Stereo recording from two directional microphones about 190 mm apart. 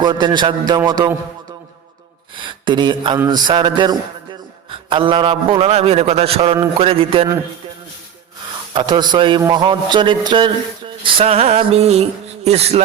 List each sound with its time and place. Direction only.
0.0 s a man's voice: 25° right (ahead or behind)
2.6 s a man's voice: 25° right (ahead or behind)
8.7 s a man's voice: 25° right (ahead or behind)